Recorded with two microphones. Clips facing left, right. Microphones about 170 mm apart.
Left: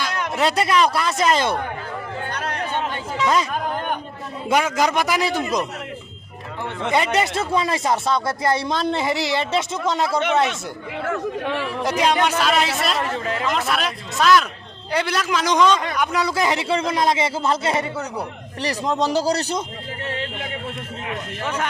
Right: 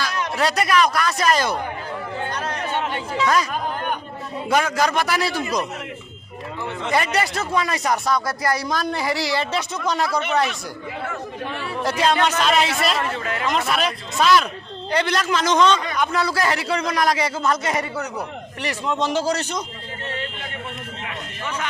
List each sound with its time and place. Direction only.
0.0 s speech: 20° left (ahead or behind)
4.4 s a man's voice: 20° left (ahead or behind)
6.9 s speech: 20° left (ahead or behind)
11.8 s a man's voice: 15° left (ahead or behind); by 13.0 s centre (ahead or behind)
13.1 s a man's voice: 30° left (ahead or behind)
13.5 s speech: centre (ahead or behind); by 18.0 s 25° left (ahead or behind)
18.6 s a man's voice: 35° left (ahead or behind)